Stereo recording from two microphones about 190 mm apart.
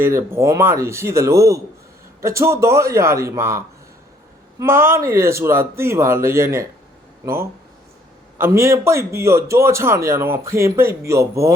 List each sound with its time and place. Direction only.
0.0 s a man's voice: 10° right (ahead or behind)
4.6 s a man's voice: 15° right (ahead or behind)
8.4 s a man's voice: 15° right (ahead or behind)